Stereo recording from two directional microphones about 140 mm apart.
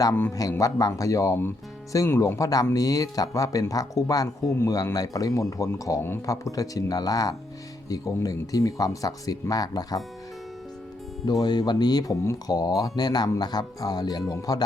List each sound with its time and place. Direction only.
0.0 s speech: 15° left (ahead or behind)
11.3 s speech: 30° left (ahead or behind)